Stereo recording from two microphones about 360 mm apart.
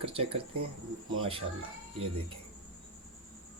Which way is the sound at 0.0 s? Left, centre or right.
Centre.